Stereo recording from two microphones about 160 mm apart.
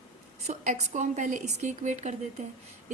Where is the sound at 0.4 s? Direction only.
50° right (ahead or behind).